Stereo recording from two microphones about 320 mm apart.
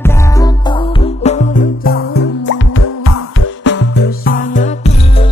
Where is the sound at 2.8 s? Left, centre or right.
Left.